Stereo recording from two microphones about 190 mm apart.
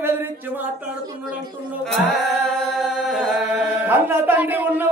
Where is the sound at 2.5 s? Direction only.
Centre (ahead or behind).